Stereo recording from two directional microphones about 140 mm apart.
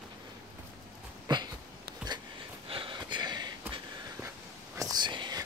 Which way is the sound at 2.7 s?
35° right (ahead or behind).